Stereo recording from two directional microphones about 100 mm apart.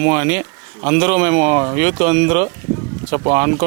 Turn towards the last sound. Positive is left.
turn(degrees=-25)  # may be behind; listen again after turning